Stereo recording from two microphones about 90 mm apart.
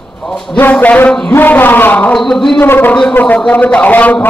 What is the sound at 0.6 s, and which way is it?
A man's voice, 20° left (ahead or behind).